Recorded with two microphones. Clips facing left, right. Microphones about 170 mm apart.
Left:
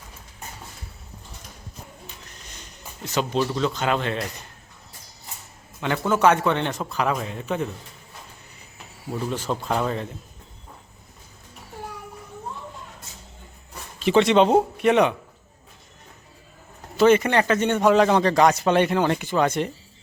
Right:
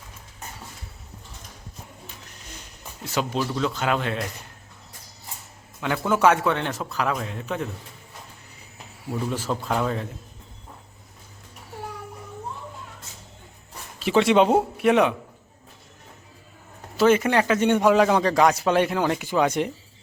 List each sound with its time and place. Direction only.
3.0 s a man's voice: 5° right (ahead or behind)
5.8 s a man's voice: 5° right (ahead or behind)
9.0 s a man's voice: 5° right (ahead or behind)
14.0 s a man's voice: 5° right (ahead or behind)
17.0 s a man's voice: 5° right (ahead or behind)